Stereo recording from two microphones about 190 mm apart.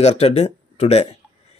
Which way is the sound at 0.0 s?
35° left (ahead or behind).